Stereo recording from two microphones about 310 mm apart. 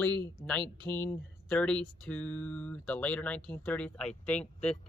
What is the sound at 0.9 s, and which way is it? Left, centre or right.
Speech, centre.